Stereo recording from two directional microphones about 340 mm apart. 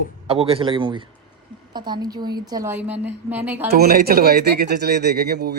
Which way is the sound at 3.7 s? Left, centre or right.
Right.